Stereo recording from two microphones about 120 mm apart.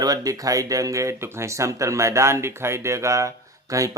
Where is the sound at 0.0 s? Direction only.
30° right (ahead or behind).